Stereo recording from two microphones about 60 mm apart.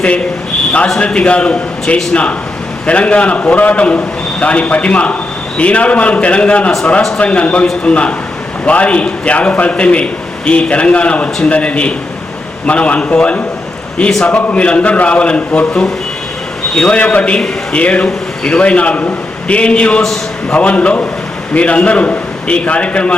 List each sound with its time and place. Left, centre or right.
0.9 s a man's voice: centre